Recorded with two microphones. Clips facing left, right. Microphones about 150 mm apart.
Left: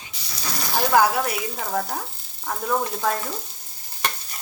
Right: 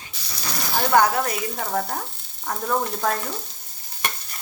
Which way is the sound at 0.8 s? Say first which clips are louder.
Even; 5° left (ahead or behind).